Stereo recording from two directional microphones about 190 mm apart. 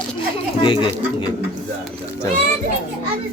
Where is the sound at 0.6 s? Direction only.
25° left (ahead or behind).